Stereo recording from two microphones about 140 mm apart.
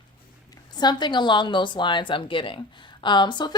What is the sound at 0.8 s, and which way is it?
Speech, 30° left (ahead or behind).